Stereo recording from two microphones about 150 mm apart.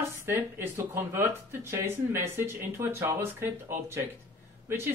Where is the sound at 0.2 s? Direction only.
20° right (ahead or behind).